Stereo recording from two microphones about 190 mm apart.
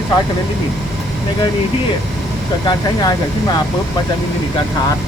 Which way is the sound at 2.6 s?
20° left (ahead or behind).